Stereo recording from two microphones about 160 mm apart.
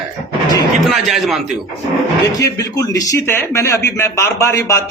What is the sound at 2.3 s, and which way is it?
A man's voice, 20° left (ahead or behind).